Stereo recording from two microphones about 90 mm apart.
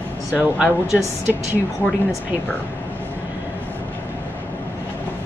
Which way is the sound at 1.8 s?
20° left (ahead or behind).